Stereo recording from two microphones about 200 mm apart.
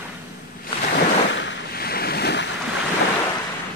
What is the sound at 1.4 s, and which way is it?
Waves, 50° left (ahead or behind).